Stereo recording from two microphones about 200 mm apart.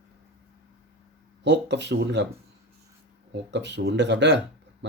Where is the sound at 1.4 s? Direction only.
60° right (ahead or behind).